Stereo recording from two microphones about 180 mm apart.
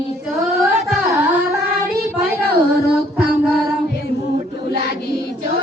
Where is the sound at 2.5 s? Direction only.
55° right (ahead or behind).